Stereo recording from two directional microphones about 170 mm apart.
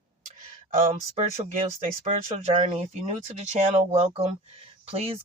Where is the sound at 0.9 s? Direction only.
40° right (ahead or behind).